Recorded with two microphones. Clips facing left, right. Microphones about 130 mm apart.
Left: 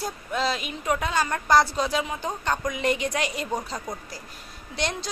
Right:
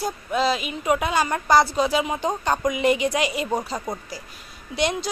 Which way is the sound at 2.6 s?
10° right (ahead or behind).